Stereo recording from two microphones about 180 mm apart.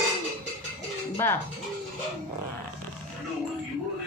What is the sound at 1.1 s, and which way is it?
Speech, 15° left (ahead or behind).